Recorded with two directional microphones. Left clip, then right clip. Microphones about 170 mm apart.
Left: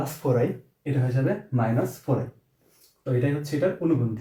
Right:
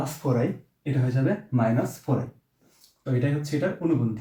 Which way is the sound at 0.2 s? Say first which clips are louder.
Left 3 dB; 15° left (ahead or behind).